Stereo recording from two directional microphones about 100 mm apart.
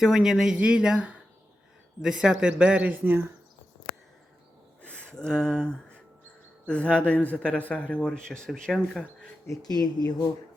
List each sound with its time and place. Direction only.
0.0 s speech: 5° right (ahead or behind)
4.8 s a man's voice: 10° left (ahead or behind)
9.5 s speech: 40° left (ahead or behind)